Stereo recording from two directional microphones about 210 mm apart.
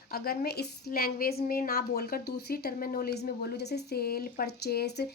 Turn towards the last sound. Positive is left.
turn(degrees=50)  # may be behind; listen again after turning